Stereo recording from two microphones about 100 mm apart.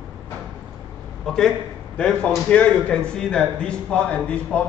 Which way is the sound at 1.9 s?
10° left (ahead or behind).